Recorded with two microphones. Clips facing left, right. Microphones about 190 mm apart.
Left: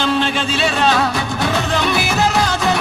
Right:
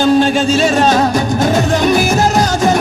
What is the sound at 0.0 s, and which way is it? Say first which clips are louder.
Music: right 8 dB; 45° right (ahead or behind).